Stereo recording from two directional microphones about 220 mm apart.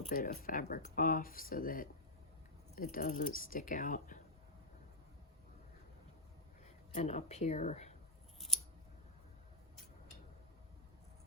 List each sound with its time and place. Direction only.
0.1 s speech: 40° left (ahead or behind)
6.9 s speech: 30° left (ahead or behind)